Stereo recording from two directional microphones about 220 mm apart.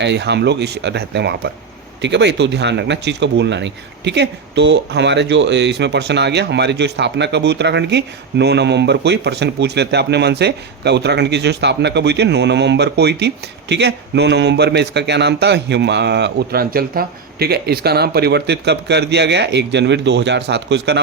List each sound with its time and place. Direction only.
0.0 s speech: 50° right (ahead or behind)